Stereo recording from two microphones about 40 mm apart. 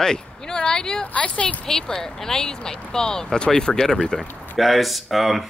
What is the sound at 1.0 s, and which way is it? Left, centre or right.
Speech, left.